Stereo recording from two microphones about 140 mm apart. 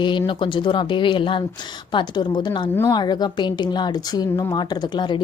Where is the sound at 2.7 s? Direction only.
15° left (ahead or behind).